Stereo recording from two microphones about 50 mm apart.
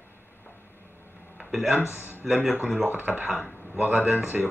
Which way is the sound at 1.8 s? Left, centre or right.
Left.